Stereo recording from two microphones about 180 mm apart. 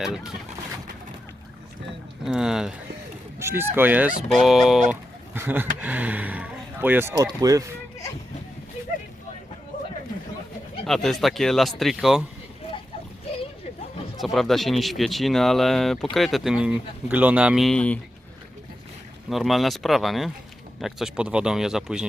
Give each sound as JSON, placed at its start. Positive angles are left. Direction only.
{"t": 2.2, "sound": "speech", "side_deg": -5}
{"t": 3.3, "sound": "speech", "side_deg": -15}
{"t": 10.8, "sound": "speech", "side_deg": 0}
{"t": 14.2, "sound": "speech", "side_deg": 0}
{"t": 19.3, "sound": "speech", "side_deg": 0}